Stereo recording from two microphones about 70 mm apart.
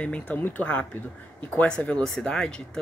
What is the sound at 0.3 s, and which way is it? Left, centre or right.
Speech, left.